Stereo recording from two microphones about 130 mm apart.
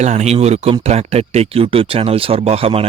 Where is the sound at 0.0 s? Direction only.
60° right (ahead or behind).